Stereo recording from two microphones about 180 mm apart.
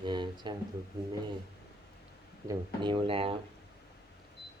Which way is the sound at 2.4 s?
25° right (ahead or behind).